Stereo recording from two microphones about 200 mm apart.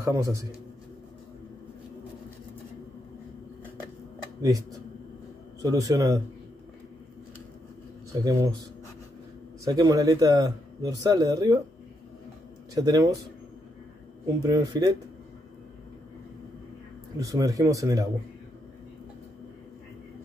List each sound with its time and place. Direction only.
0.0 s a man's voice: 15° right (ahead or behind)
4.4 s a man's voice: 15° right (ahead or behind)
8.2 s speech: 20° right (ahead or behind)
9.7 s a man's voice: 20° right (ahead or behind)
12.7 s speech: 20° right (ahead or behind)
14.2 s speech: 20° right (ahead or behind)
17.2 s a man's voice: 15° right (ahead or behind)